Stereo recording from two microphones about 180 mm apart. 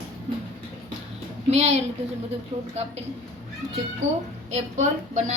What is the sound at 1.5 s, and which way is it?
Speech, 35° right (ahead or behind).